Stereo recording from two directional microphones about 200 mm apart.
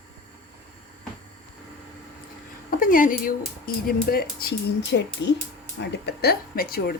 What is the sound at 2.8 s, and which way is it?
Speech, 45° left (ahead or behind).